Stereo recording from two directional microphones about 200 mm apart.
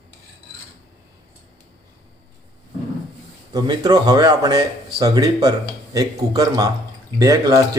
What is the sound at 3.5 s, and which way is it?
Speech, 20° right (ahead or behind).